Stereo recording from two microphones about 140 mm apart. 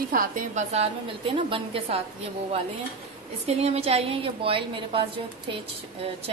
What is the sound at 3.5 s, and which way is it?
A woman's voice, 45° right (ahead or behind).